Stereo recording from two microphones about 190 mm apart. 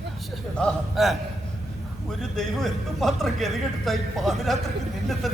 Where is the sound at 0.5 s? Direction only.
Centre (ahead or behind).